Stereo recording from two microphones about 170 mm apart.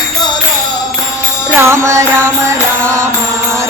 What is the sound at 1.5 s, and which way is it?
Music, 15° right (ahead or behind).